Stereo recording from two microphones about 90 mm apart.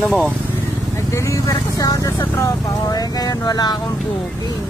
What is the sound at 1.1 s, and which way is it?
Speech, 35° left (ahead or behind).